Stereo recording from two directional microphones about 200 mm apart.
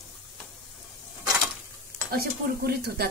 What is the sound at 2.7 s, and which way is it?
Speech, 55° right (ahead or behind).